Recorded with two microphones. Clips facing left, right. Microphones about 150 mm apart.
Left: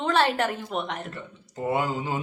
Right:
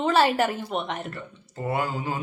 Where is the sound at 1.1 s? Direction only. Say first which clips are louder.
Even; 15° left (ahead or behind).